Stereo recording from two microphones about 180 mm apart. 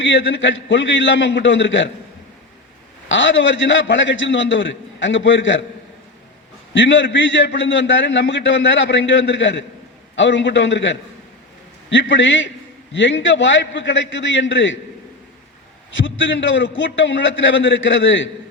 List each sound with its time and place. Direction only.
0.0 s a man's voice: 90° left
3.1 s a man's voice: 90° left
6.7 s a man's voice: 90° left
16.0 s a man's voice: 90° left